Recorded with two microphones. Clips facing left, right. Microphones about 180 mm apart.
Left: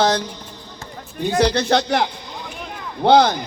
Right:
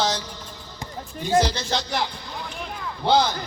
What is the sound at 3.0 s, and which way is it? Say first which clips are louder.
Speech: left 7 dB; 65° left (ahead or behind).